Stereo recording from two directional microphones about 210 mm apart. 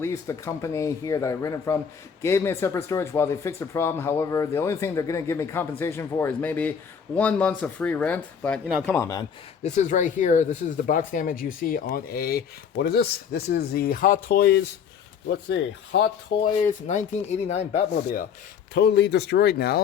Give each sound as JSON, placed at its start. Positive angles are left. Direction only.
{"t": 0.0, "sound": "speech", "side_deg": 15}
{"t": 9.6, "sound": "speech", "side_deg": 35}
{"t": 16.8, "sound": "speech", "side_deg": 35}
{"t": 18.7, "sound": "speech", "side_deg": 55}